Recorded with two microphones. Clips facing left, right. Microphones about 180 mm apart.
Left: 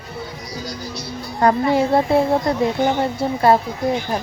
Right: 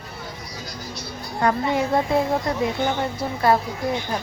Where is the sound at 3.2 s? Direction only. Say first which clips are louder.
Left 6 dB; 25° left (ahead or behind).